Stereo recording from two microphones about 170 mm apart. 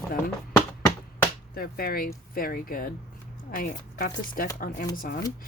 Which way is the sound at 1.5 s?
60° left (ahead or behind).